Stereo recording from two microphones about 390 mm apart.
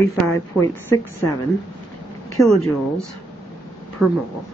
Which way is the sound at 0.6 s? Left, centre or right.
Centre.